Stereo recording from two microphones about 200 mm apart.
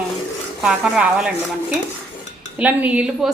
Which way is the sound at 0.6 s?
5° right (ahead or behind).